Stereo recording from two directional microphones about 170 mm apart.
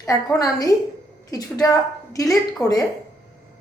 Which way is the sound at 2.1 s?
20° left (ahead or behind).